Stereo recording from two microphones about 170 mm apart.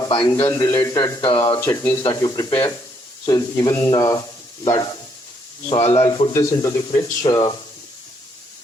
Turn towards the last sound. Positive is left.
turn(degrees=25)  # may be behind; listen again after turning